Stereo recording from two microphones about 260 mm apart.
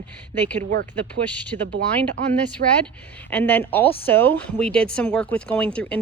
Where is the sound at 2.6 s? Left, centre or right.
Right.